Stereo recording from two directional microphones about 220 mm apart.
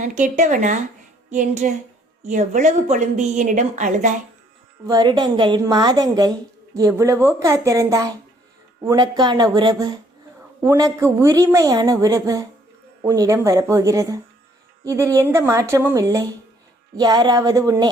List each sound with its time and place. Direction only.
0.0 s speech: 35° right (ahead or behind)
4.9 s a woman's voice: 20° right (ahead or behind)